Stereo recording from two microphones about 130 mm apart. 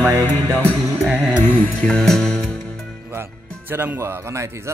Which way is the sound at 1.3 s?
15° left (ahead or behind).